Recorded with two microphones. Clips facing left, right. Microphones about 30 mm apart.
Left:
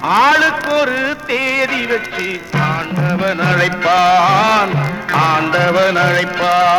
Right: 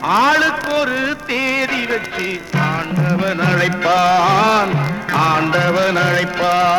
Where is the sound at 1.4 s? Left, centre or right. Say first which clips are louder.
Left 2 dB; left.